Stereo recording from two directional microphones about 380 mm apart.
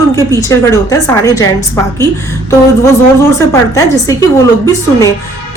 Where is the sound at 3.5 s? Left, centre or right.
Centre.